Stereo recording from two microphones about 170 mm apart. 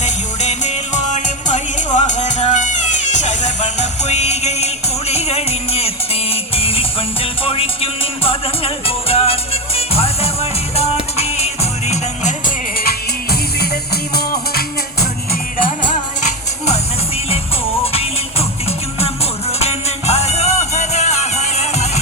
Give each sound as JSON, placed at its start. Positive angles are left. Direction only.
{"t": 0.0, "sound": "music", "side_deg": 40}
{"t": 13.3, "sound": "music", "side_deg": 65}
{"t": 18.9, "sound": "music", "side_deg": 35}